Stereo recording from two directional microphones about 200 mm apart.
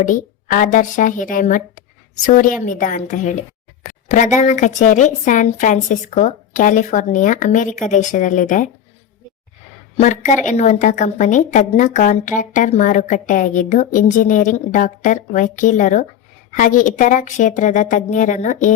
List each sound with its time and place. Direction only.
0.0 s a woman's voice: 40° left (ahead or behind)
10.0 s a woman's voice: 40° left (ahead or behind)